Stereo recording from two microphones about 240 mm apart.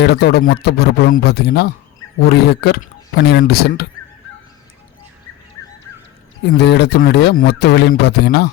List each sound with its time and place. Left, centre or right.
0.0 s speech: left
6.4 s speech: left